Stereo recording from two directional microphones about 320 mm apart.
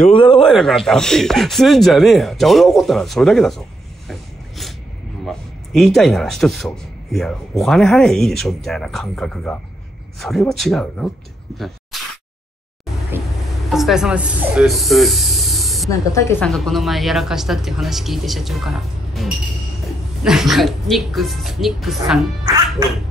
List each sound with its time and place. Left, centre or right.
0.0 s speech: centre
0.4 s a man's voice: centre
4.1 s a sound: centre
5.2 s a man's voice: centre
11.5 s a sound: centre
13.7 s a man's voice: centre